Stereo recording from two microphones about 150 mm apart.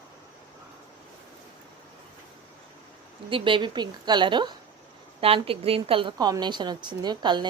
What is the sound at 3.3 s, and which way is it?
A woman's voice, 35° right (ahead or behind).